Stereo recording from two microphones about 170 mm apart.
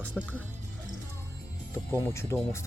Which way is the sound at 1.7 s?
15° left (ahead or behind).